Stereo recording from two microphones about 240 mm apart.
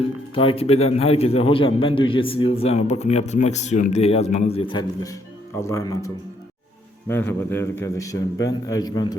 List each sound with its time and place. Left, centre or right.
0.3 s a man's voice: left
7.1 s a man's voice: centre